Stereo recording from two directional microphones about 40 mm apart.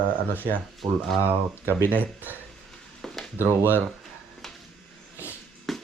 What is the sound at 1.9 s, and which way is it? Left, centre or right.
Speech, right.